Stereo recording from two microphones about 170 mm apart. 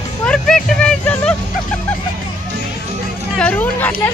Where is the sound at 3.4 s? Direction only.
10° left (ahead or behind).